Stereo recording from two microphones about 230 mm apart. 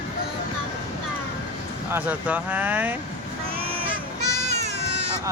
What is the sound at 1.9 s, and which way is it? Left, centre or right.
Speech, centre.